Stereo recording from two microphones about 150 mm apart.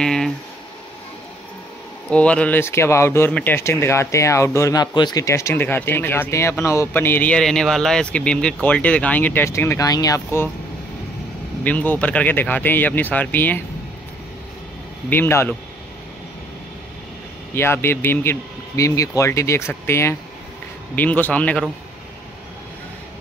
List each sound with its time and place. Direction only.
0.0 s a sound: 5° left (ahead or behind)
2.0 s speech: 5° left (ahead or behind)
11.6 s speech: 10° left (ahead or behind)
15.0 s speech: 15° left (ahead or behind)
17.6 s speech: 15° left (ahead or behind)